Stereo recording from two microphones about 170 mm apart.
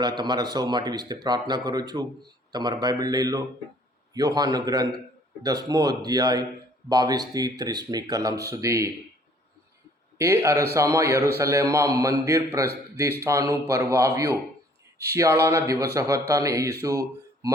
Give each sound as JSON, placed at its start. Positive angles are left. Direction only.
{"t": 0.0, "sound": "speech", "side_deg": -25}
{"t": 10.2, "sound": "a man's voice", "side_deg": -15}